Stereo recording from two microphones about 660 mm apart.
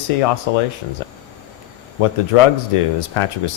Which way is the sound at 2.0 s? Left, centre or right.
Left.